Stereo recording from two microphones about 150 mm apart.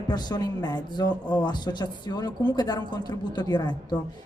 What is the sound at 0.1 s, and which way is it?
Speech, 25° left (ahead or behind).